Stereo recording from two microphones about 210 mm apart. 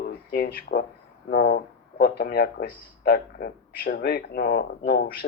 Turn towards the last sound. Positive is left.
turn(degrees=50)  # may be behind; listen again after turning